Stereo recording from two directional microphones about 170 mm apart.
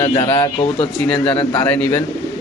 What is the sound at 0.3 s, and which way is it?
Speech, 30° left (ahead or behind).